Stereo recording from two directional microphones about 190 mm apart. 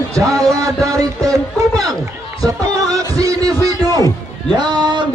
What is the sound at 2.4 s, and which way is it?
Music, 20° right (ahead or behind).